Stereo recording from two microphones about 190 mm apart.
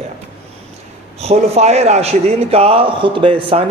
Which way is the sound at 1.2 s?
35° right (ahead or behind).